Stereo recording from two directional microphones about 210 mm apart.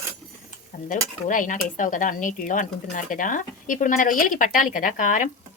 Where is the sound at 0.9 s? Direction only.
40° left (ahead or behind).